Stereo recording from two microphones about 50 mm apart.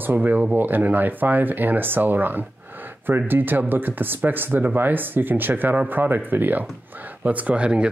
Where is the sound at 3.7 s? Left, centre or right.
Right.